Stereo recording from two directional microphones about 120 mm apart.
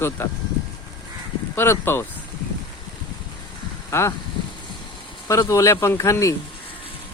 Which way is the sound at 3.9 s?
25° left (ahead or behind).